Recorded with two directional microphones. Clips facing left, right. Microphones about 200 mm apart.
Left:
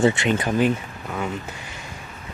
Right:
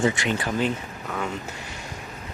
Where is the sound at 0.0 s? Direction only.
25° left (ahead or behind).